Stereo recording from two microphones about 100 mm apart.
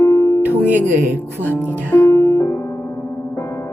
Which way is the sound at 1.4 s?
15° left (ahead or behind).